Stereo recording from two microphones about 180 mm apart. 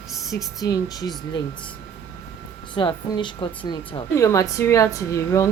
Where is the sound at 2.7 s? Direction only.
25° left (ahead or behind).